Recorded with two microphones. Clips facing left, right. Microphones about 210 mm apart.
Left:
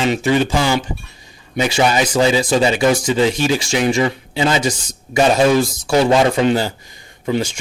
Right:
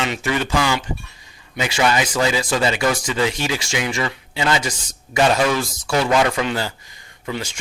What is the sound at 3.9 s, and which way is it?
Speech, 25° left (ahead or behind).